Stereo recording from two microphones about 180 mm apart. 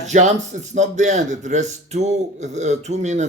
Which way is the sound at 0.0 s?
40° right (ahead or behind).